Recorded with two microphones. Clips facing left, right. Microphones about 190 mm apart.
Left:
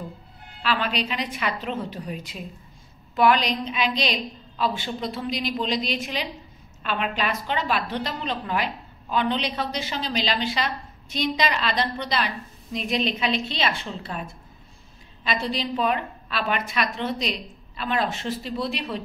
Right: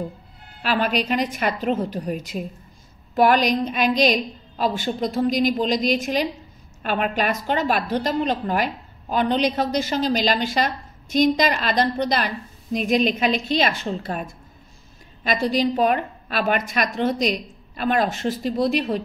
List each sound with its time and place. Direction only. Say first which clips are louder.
0.6 s a woman's voice: right 4 dB; 45° right (ahead or behind)